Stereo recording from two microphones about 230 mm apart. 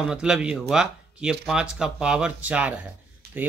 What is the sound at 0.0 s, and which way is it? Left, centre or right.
Speech, centre.